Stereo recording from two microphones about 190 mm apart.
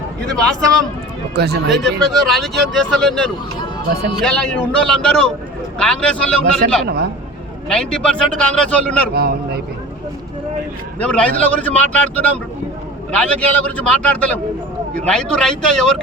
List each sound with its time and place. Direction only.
1.4 s speech: 60° right (ahead or behind)
1.8 s speech: centre (ahead or behind)
9.1 s a man's voice: 55° right (ahead or behind)
11.0 s a man's voice: 5° left (ahead or behind)